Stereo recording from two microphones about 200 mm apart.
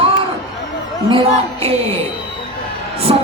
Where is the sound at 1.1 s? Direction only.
30° right (ahead or behind).